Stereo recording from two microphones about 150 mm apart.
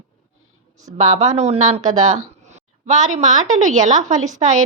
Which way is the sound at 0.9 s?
55° right (ahead or behind).